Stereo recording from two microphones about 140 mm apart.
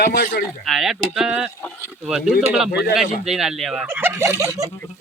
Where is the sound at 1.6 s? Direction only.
15° left (ahead or behind).